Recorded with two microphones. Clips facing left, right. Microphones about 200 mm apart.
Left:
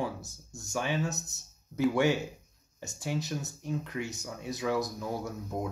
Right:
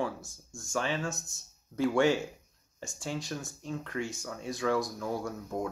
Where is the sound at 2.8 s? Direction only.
20° left (ahead or behind).